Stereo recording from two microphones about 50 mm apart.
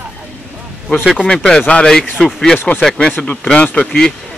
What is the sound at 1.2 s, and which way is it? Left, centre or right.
Speech, centre.